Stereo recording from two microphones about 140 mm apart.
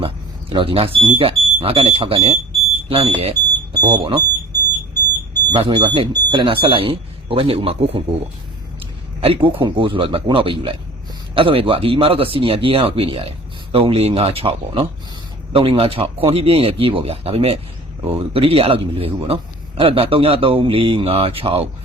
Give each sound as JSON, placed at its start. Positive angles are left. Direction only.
{"t": 0.5, "sound": "a man's voice", "side_deg": -40}
{"t": 3.8, "sound": "a man's voice", "side_deg": -30}
{"t": 5.5, "sound": "a man's voice", "side_deg": -35}